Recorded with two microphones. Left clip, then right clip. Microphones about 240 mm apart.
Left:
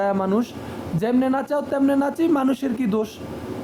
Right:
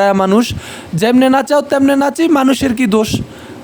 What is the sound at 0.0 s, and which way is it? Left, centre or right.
Speech, right.